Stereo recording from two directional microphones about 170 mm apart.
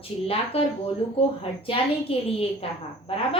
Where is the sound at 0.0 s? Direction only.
35° left (ahead or behind).